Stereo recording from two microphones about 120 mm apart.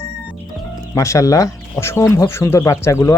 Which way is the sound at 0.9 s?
25° left (ahead or behind).